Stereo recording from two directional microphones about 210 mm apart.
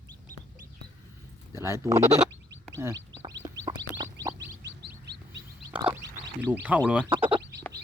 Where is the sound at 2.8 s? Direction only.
10° right (ahead or behind).